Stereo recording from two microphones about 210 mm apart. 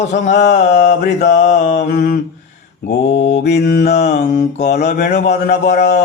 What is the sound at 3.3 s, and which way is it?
Mantra, 50° left (ahead or behind).